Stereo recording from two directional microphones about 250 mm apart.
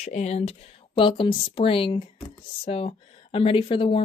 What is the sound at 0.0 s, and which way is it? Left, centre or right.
Speech, left.